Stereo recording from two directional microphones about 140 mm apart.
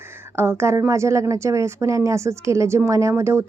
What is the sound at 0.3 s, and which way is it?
A woman's voice, 15° right (ahead or behind).